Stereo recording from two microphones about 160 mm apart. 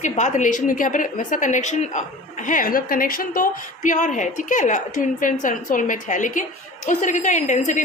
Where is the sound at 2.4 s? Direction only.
60° left (ahead or behind).